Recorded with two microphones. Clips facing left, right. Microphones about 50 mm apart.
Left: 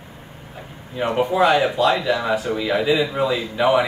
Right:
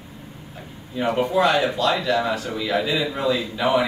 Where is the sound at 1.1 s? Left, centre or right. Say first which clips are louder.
Left 3 dB; centre.